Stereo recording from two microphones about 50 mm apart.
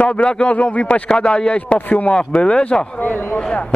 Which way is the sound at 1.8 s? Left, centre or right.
Left.